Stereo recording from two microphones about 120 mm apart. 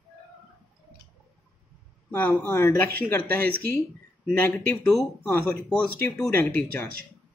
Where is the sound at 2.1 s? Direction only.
15° left (ahead or behind).